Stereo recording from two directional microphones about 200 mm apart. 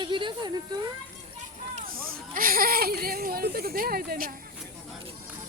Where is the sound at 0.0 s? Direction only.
25° right (ahead or behind).